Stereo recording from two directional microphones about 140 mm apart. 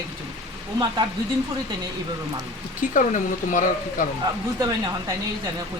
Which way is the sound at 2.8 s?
65° left (ahead or behind).